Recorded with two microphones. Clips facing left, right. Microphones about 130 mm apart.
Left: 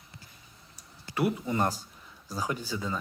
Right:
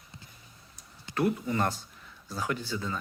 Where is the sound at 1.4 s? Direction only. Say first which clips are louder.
Left 1 dB; 15° left (ahead or behind).